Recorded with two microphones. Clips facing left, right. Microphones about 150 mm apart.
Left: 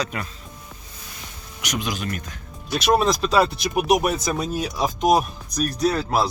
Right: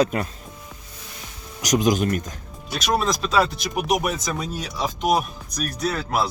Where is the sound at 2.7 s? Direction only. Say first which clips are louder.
Left 4 dB; 5° left (ahead or behind).